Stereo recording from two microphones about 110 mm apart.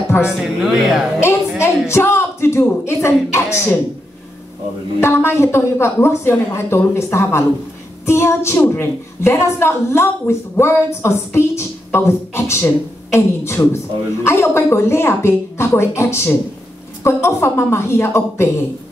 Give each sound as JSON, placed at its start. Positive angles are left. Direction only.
{"t": 0.4, "sound": "speech", "side_deg": -5}
{"t": 1.6, "sound": "a woman's voice", "side_deg": 25}
{"t": 5.0, "sound": "a woman's voice", "side_deg": 20}